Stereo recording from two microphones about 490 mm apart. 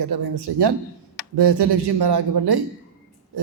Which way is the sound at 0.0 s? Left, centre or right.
Right.